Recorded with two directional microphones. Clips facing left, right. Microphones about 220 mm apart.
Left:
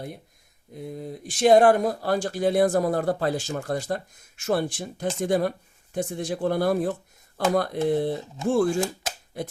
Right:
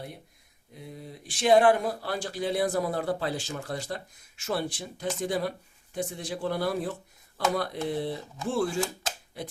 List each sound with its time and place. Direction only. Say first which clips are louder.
0.8 s speech: left 8 dB; 50° left (ahead or behind)